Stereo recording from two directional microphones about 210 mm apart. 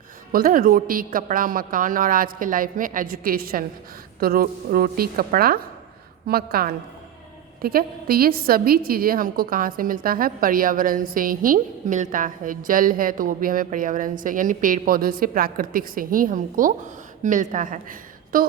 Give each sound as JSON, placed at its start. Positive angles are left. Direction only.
{"t": 0.3, "sound": "a woman's voice", "side_deg": -40}